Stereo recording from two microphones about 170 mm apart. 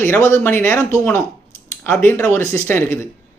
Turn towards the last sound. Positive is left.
turn(degrees=15)  # may be behind; listen again after turning